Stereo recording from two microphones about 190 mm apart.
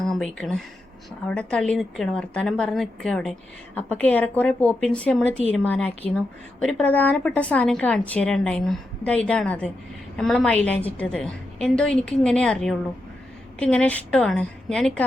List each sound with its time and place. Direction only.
0.0 s a woman's voice: 5° left (ahead or behind)